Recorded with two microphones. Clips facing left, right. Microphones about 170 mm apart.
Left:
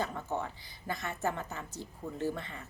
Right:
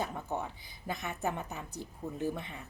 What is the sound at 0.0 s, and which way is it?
A woman's voice, 15° right (ahead or behind).